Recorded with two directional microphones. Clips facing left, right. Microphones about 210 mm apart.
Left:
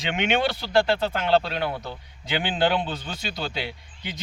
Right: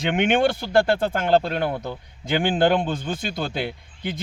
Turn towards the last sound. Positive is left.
turn(degrees=-50)  # may be behind; listen again after turning